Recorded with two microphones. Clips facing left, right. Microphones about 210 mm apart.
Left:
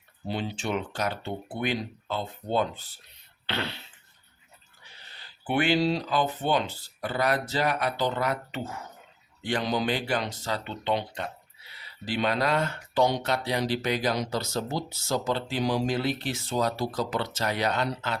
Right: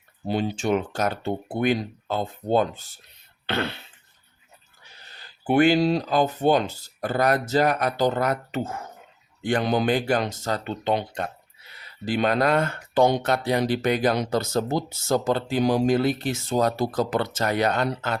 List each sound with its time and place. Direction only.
0.3 s speech: 45° right (ahead or behind)
3.4 s throat clearing: 50° right (ahead or behind)
5.1 s speech: 45° right (ahead or behind)